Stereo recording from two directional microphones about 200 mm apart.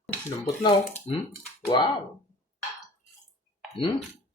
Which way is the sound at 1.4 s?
10° left (ahead or behind).